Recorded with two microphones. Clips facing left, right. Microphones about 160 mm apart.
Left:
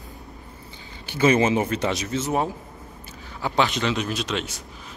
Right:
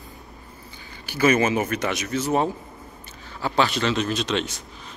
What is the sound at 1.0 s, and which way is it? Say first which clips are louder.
Speech: left 1 dB; 25° left (ahead or behind).